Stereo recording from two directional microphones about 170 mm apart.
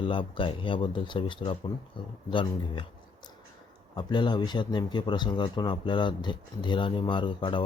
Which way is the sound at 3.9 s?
25° left (ahead or behind).